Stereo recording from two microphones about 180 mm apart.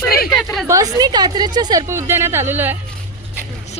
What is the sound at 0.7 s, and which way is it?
A woman's voice, 20° right (ahead or behind).